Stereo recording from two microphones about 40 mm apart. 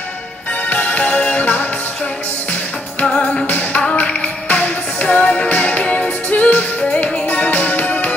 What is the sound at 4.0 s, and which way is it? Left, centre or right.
Music, left.